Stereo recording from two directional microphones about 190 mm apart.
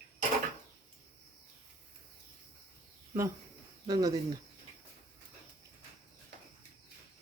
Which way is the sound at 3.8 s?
20° right (ahead or behind).